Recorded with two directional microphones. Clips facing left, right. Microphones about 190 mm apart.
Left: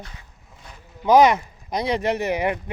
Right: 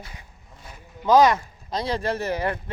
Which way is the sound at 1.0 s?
20° left (ahead or behind).